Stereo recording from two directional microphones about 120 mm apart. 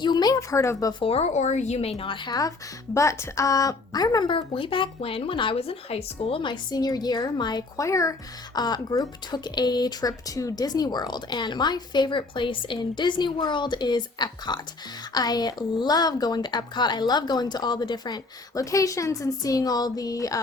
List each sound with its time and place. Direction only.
0.0 s speech: 35° left (ahead or behind)
1.0 s speech: 60° left (ahead or behind); by 2.5 s 35° left (ahead or behind)
2.9 s a woman's voice: 25° left (ahead or behind)
4.4 s speech: 50° left (ahead or behind); by 20.4 s 30° left (ahead or behind)